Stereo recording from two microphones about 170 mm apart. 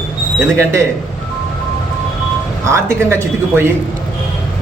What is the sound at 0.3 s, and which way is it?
Speech, 15° right (ahead or behind).